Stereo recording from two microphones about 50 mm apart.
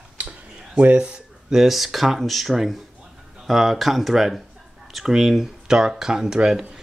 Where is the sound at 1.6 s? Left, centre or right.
Centre.